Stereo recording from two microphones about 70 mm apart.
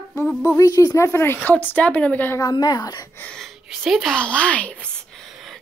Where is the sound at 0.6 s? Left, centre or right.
Left.